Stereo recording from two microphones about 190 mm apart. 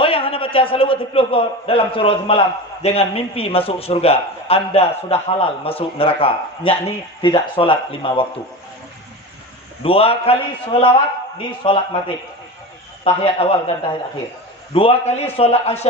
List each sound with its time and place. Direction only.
0.0 s a man's voice: 30° left (ahead or behind)
9.8 s a man's voice: 30° left (ahead or behind)
13.0 s a man's voice: 30° left (ahead or behind)
14.7 s a man's voice: 30° left (ahead or behind)